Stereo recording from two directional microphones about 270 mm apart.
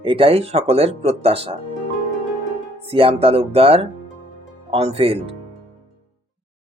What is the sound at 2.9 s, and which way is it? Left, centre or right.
Speech, right.